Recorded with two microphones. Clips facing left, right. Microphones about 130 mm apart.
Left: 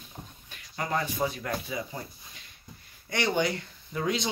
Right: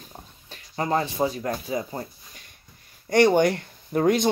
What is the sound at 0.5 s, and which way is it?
Speech, 35° right (ahead or behind).